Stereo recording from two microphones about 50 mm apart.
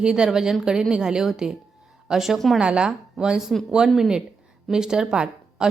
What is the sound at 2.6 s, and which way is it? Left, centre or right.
A woman's voice, centre.